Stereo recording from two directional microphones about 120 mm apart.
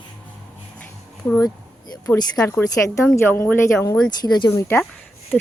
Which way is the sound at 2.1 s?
30° left (ahead or behind).